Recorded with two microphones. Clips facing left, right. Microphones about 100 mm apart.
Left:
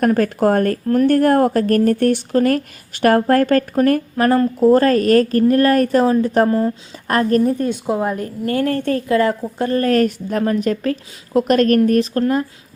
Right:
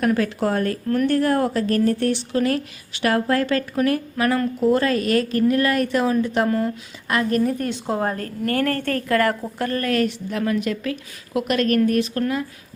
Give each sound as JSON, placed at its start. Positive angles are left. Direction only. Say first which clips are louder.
{"t": 0.0, "sound": "speech", "louder": "left 5 dB", "side_deg": 45}
{"t": 7.1, "sound": "a woman's voice", "louder": "left 5 dB", "side_deg": 40}
{"t": 7.6, "sound": "a woman's voice", "louder": "left 4 dB", "side_deg": 15}
{"t": 9.9, "sound": "a woman's voice", "louder": "left 5 dB", "side_deg": 45}